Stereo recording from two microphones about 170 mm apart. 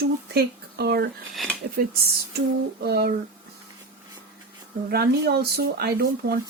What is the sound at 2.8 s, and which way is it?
Speech, 75° right (ahead or behind).